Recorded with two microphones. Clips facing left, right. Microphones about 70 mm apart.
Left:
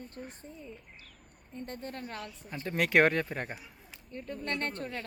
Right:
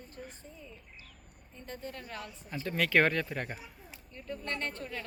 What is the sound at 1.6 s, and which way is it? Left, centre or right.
Speech, left.